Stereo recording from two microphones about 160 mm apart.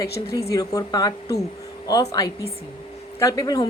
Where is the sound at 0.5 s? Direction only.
25° left (ahead or behind).